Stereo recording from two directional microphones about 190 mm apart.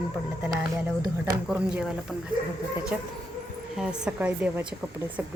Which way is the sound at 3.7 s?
5° right (ahead or behind).